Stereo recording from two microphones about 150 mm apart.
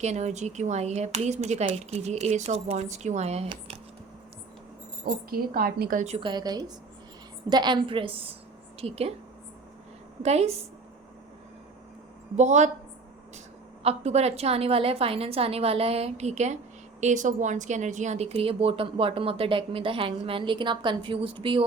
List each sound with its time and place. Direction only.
0.0 s speech: 50° right (ahead or behind)
5.0 s a woman's voice: 80° right
6.1 s a woman's voice: 35° right (ahead or behind)
10.2 s speech: 45° right (ahead or behind)
12.4 s speech: 50° right (ahead or behind)
13.8 s speech: 45° right (ahead or behind)